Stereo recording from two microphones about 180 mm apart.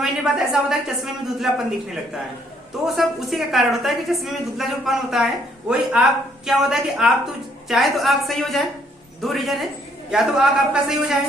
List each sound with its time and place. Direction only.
0.0 s a woman's voice: centre (ahead or behind)
2.8 s a woman's voice: centre (ahead or behind)